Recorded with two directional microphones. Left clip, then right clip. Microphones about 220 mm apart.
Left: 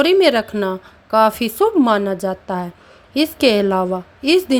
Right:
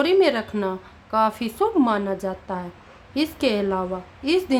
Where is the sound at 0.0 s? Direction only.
25° left (ahead or behind).